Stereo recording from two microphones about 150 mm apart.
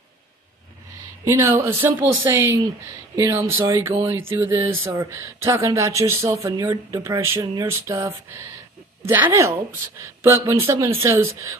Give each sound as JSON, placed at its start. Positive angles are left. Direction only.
{"t": 1.2, "sound": "speech", "side_deg": -20}